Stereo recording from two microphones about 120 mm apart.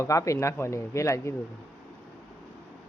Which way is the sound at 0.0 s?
25° left (ahead or behind).